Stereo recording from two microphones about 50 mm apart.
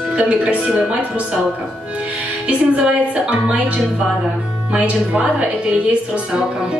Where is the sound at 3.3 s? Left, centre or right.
Right.